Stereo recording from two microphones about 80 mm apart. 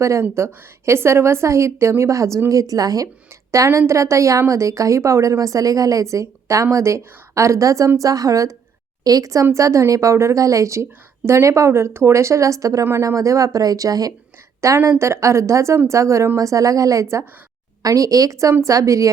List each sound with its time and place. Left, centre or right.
0.0 s a woman's voice: right
3.2 s a woman's voice: right
14.6 s a woman's voice: right